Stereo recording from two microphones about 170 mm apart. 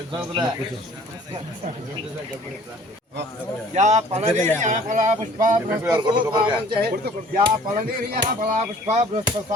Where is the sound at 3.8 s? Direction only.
45° right (ahead or behind).